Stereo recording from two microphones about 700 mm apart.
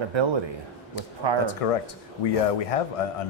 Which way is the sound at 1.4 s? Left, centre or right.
Left.